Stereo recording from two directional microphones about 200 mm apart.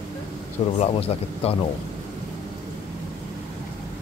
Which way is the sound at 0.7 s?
30° left (ahead or behind).